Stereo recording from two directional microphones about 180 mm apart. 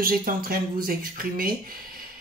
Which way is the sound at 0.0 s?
50° right (ahead or behind).